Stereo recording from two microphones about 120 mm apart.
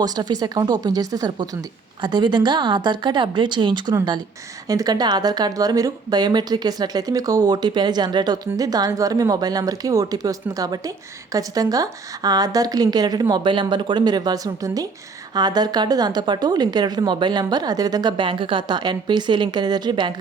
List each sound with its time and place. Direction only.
0.0 s speech: 35° right (ahead or behind)